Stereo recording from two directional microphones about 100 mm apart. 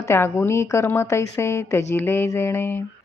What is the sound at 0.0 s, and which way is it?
A woman's voice, 25° left (ahead or behind).